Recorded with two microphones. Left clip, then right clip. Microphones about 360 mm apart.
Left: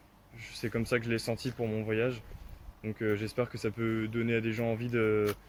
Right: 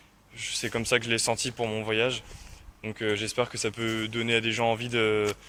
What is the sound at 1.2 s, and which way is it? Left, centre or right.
Speech, right.